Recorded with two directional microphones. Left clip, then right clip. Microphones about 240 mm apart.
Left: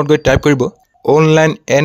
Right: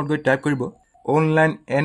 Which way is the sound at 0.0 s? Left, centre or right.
Left.